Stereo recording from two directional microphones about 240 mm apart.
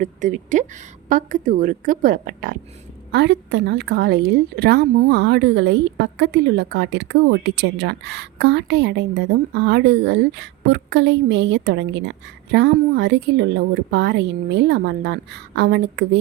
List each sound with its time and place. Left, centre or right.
0.0 s a woman's voice: right
3.1 s a woman's voice: right